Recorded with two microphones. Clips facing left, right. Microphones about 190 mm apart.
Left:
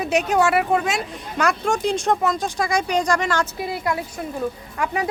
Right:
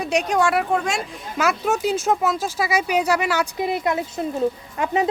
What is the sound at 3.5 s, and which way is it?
A woman's voice, 20° right (ahead or behind).